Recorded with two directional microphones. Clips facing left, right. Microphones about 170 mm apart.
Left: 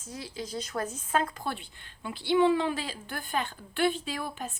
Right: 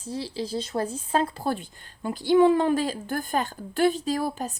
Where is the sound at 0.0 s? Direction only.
30° right (ahead or behind).